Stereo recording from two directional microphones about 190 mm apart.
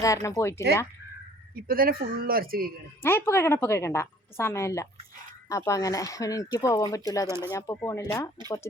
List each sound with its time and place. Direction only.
0.0 s a woman's voice: 15° left (ahead or behind)
1.6 s speech: 50° right (ahead or behind)
3.0 s a woman's voice: 10° left (ahead or behind)
7.3 s speech: 15° right (ahead or behind)
7.5 s a woman's voice: 15° left (ahead or behind)